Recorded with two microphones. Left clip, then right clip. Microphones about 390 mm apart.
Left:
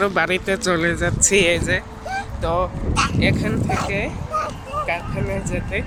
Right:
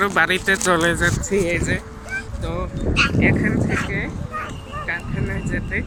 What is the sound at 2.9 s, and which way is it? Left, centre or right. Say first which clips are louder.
Speech: right 2 dB; centre.